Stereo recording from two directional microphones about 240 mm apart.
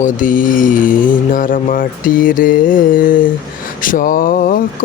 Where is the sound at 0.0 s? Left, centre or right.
Left.